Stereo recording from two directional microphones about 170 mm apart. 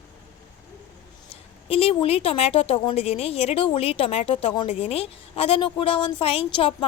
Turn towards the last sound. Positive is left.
turn(degrees=35)  # may be behind; listen again after turning